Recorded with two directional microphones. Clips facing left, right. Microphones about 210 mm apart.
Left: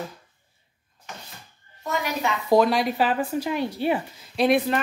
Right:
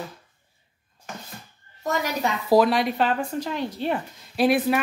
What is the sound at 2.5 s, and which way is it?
Speech, centre (ahead or behind).